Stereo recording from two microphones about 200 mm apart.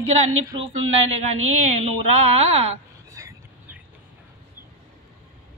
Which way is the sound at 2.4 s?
30° right (ahead or behind).